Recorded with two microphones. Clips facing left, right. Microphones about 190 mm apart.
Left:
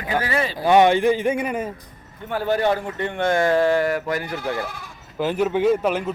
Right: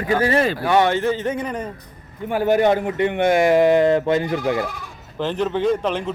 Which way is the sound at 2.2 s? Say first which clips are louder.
Right 4 dB; 15° right (ahead or behind).